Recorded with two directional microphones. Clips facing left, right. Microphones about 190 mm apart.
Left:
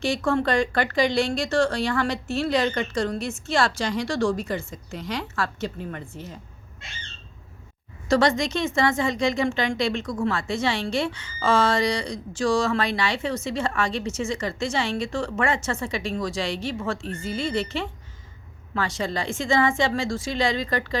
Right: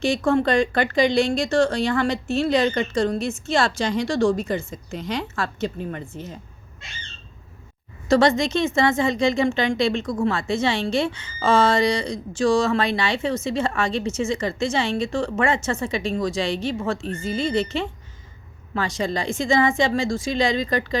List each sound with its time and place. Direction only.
0.0 s speech: 20° right (ahead or behind)
8.0 s a woman's voice: 25° right (ahead or behind)